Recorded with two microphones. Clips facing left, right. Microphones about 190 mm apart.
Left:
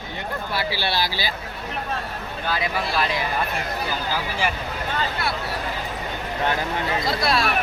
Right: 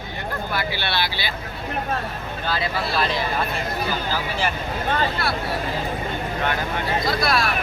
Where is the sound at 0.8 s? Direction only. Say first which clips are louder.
Left 1 dB; 40° left (ahead or behind).